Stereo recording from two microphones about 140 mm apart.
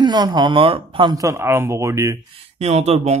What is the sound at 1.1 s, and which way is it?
Speech, 20° right (ahead or behind).